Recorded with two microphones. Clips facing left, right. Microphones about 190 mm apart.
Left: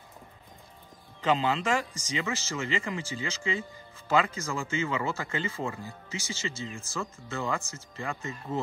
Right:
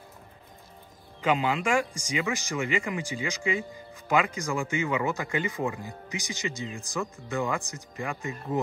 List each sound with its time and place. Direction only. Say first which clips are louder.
1.2 s speech: right 1 dB; 10° right (ahead or behind)